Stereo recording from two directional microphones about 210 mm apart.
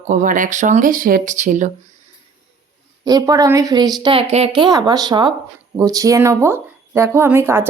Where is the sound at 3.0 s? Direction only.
15° right (ahead or behind).